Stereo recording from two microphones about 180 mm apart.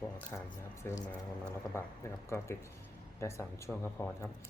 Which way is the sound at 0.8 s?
15° left (ahead or behind).